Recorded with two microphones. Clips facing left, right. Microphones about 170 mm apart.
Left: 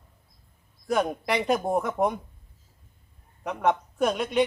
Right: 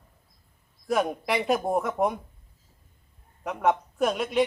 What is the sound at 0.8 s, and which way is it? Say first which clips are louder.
Speech: even; centre (ahead or behind).